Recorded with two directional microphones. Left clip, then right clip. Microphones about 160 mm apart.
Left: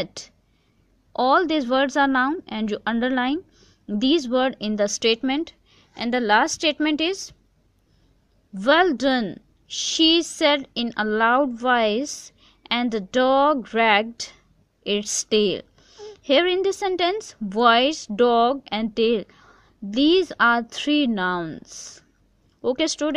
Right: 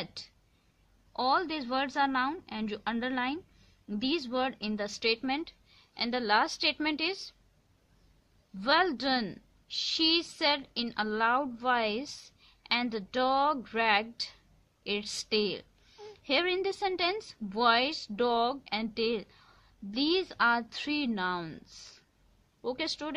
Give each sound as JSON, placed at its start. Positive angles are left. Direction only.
{"t": 0.0, "sound": "a woman's voice", "side_deg": 35}
{"t": 8.5, "sound": "a woman's voice", "side_deg": 25}
{"t": 15.9, "sound": "a sound", "side_deg": 15}
{"t": 16.3, "sound": "a woman's voice", "side_deg": 30}